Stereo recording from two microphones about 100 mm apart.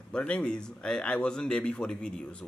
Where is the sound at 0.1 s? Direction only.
10° left (ahead or behind).